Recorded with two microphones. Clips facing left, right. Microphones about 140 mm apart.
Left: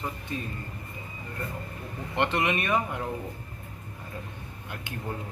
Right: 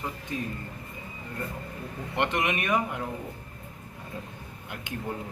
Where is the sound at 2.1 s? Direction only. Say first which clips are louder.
Left 1 dB; 15° right (ahead or behind).